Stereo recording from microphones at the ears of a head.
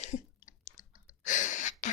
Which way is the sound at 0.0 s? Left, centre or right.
Left.